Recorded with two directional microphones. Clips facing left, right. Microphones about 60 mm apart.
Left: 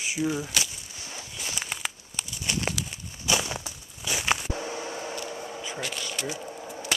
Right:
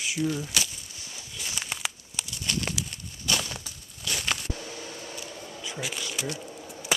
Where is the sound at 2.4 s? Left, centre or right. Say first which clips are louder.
Left 1 dB; centre.